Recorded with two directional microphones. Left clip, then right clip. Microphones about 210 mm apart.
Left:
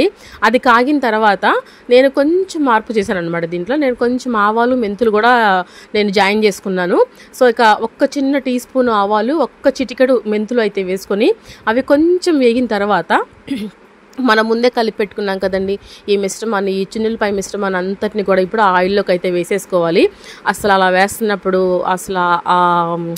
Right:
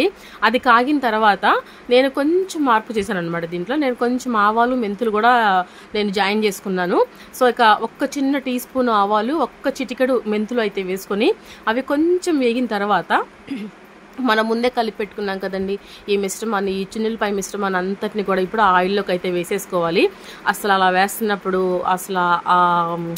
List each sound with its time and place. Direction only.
0.0 s a woman's voice: 25° left (ahead or behind)